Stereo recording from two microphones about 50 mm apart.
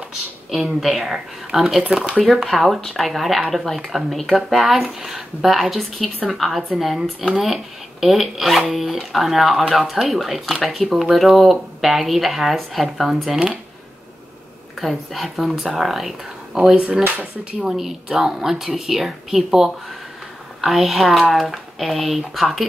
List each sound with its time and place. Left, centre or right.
0.7 s speech: centre
14.8 s speech: centre
16.7 s speech: centre
17.6 s speech: centre